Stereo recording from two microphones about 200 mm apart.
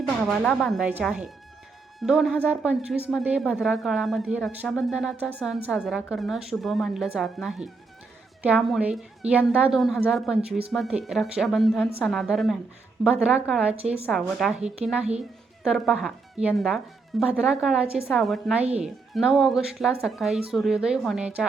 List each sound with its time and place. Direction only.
0.3 s a woman's voice: centre (ahead or behind)
13.7 s a woman's voice: 30° right (ahead or behind)
14.1 s a woman's voice: centre (ahead or behind)